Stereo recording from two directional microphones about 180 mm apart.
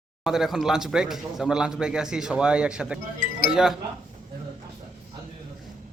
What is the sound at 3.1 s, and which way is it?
Speech, 50° left (ahead or behind).